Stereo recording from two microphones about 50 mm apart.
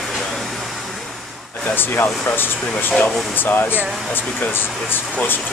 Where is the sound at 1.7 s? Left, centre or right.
Left.